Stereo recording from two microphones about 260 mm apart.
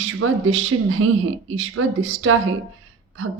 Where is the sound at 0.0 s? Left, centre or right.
Right.